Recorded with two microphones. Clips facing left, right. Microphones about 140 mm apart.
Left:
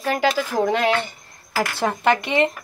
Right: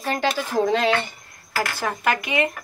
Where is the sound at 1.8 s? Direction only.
30° left (ahead or behind).